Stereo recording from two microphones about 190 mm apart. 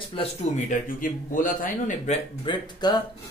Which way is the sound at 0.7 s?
45° left (ahead or behind).